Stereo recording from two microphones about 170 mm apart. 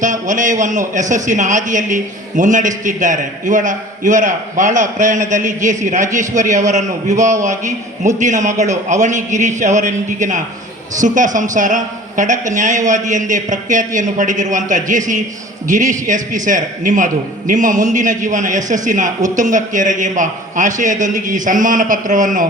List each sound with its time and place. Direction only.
0.0 s a man's voice: 50° right (ahead or behind)